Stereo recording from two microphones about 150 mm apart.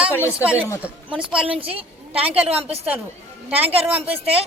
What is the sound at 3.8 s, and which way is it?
Speech, 10° right (ahead or behind).